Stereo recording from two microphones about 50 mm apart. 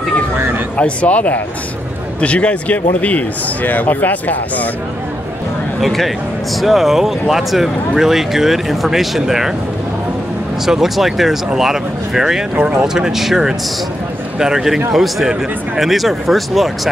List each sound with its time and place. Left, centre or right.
0.7 s speech: left
5.8 s speech: centre
10.6 s speech: centre